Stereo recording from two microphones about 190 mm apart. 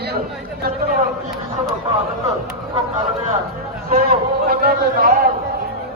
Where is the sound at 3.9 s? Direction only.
55° right (ahead or behind).